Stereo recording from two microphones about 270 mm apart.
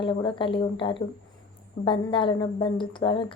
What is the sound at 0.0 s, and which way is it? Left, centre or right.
A woman's voice, centre.